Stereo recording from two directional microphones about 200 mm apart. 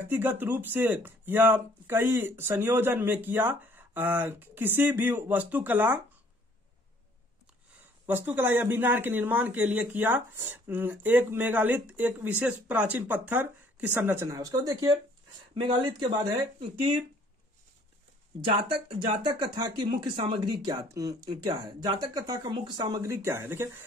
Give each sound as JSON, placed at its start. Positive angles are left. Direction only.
{"t": 0.1, "sound": "speech", "side_deg": -10}
{"t": 7.8, "sound": "speech", "side_deg": -10}
{"t": 18.5, "sound": "speech", "side_deg": -25}